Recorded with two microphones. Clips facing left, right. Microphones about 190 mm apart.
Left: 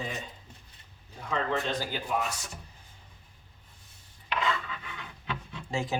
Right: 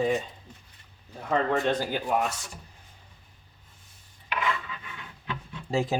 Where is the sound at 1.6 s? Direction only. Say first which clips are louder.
Right 6 dB; 55° right (ahead or behind).